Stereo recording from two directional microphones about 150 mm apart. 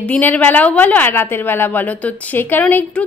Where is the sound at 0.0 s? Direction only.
10° left (ahead or behind).